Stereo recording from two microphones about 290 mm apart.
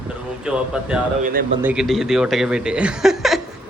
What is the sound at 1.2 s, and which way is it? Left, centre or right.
Speech, right.